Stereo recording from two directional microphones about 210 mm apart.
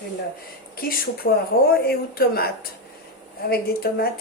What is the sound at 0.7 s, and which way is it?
Speech, 45° left (ahead or behind).